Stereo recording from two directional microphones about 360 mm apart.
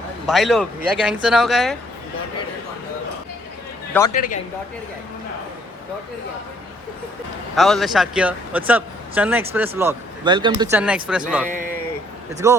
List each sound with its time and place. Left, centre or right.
0.3 s speech: centre
4.1 s speech: left
7.5 s speech: centre
12.4 s speech: centre